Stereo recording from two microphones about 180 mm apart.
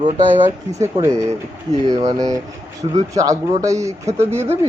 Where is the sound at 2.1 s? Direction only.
20° right (ahead or behind).